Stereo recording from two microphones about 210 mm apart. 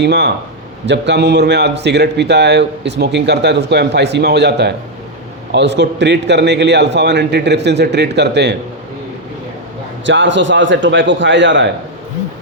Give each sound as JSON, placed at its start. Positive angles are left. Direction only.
{"t": 0.0, "sound": "a man's voice", "side_deg": -55}
{"t": 10.1, "sound": "a man's voice", "side_deg": -60}